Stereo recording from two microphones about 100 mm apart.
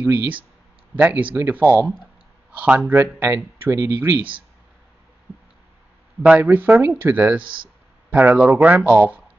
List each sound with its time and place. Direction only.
0.0 s speech: 20° right (ahead or behind)
2.5 s speech: 10° right (ahead or behind)
6.2 s speech: 15° right (ahead or behind)
7.4 s speech: 55° right (ahead or behind)
8.1 s speech: 15° right (ahead or behind)